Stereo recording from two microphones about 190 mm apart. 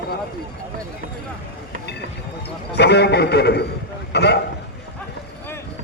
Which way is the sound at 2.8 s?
60° left (ahead or behind).